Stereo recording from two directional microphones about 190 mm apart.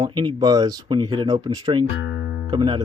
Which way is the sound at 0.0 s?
25° right (ahead or behind).